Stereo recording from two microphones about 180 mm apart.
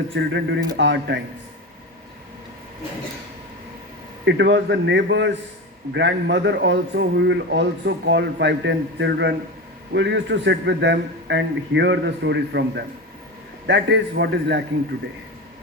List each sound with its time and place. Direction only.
0.1 s a man's voice: 80° right
4.3 s a man's voice: 85° right